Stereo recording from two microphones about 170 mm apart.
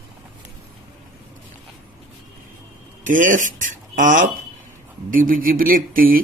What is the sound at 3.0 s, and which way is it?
Speech, 50° right (ahead or behind).